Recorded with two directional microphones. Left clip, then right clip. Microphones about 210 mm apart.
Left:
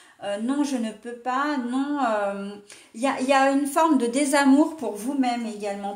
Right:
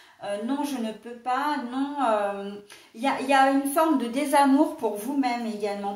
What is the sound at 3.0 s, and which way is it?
A woman's voice, 45° left (ahead or behind).